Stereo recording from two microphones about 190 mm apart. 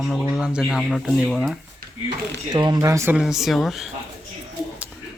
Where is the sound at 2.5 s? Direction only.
20° right (ahead or behind).